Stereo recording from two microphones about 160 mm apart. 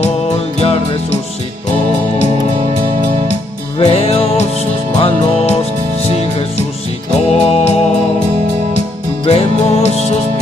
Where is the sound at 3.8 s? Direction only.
40° left (ahead or behind).